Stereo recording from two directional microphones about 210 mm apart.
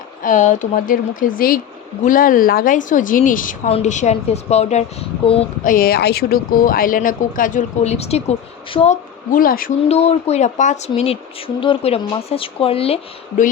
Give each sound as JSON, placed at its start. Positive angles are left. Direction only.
{"t": 0.2, "sound": "speech", "side_deg": 35}
{"t": 5.6, "sound": "speech", "side_deg": 45}
{"t": 9.9, "sound": "speech", "side_deg": 30}